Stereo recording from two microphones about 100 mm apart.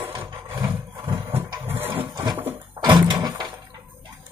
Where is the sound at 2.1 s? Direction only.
45° right (ahead or behind).